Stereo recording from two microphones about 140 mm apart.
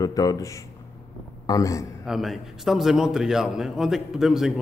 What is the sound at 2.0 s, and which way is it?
A man's voice, centre (ahead or behind).